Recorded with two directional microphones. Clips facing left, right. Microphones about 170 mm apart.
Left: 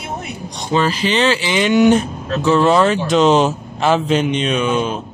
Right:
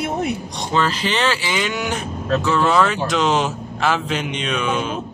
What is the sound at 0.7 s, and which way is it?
Speech, 15° left (ahead or behind).